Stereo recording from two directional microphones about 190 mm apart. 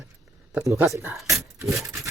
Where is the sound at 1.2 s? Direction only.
Centre (ahead or behind).